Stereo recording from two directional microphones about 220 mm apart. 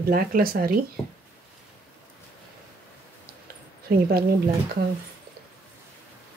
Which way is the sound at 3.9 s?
40° right (ahead or behind).